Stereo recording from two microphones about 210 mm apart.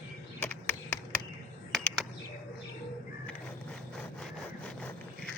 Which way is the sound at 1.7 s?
Centre (ahead or behind).